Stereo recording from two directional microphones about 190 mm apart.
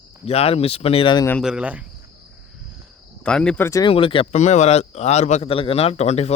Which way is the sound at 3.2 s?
5° left (ahead or behind).